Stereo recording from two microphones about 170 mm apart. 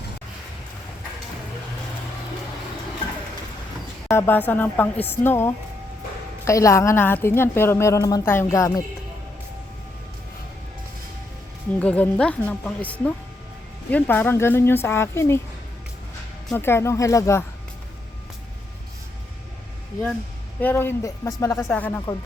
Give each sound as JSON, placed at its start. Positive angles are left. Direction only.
{"t": 4.1, "sound": "a woman's voice", "side_deg": 15}
{"t": 11.8, "sound": "a woman's voice", "side_deg": 10}
{"t": 16.5, "sound": "a woman's voice", "side_deg": 15}
{"t": 20.6, "sound": "a woman's voice", "side_deg": 10}